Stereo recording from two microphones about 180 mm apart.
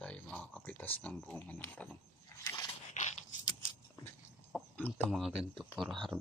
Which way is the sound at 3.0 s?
40° left (ahead or behind).